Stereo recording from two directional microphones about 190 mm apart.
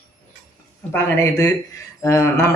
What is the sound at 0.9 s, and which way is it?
Speech, 15° left (ahead or behind).